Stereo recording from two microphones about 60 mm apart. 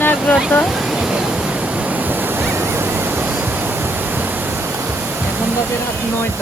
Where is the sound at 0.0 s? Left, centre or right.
Left.